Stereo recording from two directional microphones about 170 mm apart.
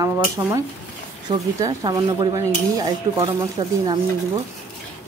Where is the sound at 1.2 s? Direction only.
20° right (ahead or behind).